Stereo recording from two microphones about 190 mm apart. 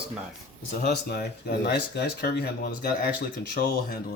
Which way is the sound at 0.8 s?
60° left (ahead or behind).